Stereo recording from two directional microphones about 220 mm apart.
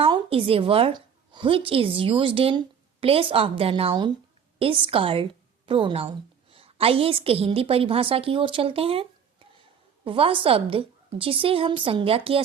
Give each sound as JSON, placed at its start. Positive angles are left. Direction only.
{"t": 0.0, "sound": "a woman's voice", "side_deg": -25}